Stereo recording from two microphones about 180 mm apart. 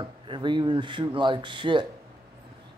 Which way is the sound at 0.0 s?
25° right (ahead or behind).